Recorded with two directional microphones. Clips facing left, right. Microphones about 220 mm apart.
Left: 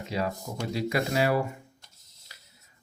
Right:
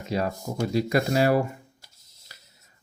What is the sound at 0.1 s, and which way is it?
Speech, 45° right (ahead or behind).